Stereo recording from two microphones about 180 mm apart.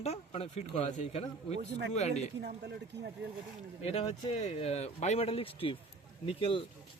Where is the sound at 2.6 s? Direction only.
70° right (ahead or behind).